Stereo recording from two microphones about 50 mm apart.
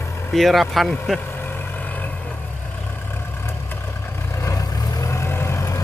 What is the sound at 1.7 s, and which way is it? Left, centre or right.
Vehicle, left.